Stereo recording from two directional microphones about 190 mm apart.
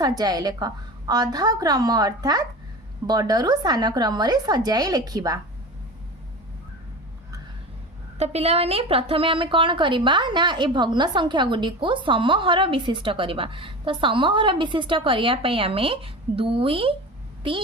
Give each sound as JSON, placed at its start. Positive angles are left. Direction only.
{"t": 0.0, "sound": "a woman's voice", "side_deg": -20}
{"t": 8.2, "sound": "a woman's voice", "side_deg": -35}